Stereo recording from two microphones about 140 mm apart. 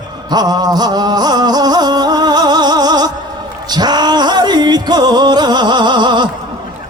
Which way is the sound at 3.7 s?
30° right (ahead or behind).